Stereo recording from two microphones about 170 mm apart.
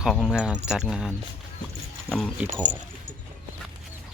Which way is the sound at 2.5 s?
45° right (ahead or behind).